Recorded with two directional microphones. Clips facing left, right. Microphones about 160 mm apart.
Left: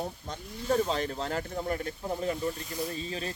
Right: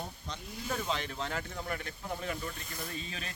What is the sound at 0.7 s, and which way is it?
Speech, 35° left (ahead or behind).